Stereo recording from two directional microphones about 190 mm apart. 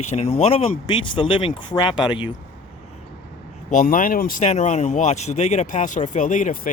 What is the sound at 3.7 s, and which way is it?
Speech, 45° left (ahead or behind).